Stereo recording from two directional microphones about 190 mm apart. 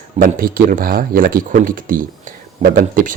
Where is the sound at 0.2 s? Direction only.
50° right (ahead or behind).